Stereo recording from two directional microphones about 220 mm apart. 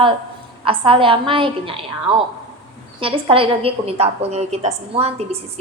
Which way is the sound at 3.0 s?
25° right (ahead or behind).